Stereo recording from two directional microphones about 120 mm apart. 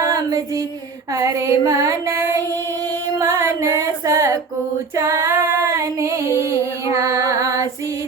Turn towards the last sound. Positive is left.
turn(degrees=-25)  # may be behind; listen again after turning